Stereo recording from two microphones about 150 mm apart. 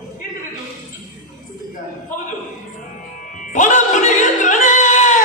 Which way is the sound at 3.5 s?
55° left (ahead or behind).